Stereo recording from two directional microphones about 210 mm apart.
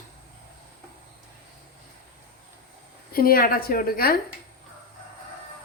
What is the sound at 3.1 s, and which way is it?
A woman's voice, 45° left (ahead or behind).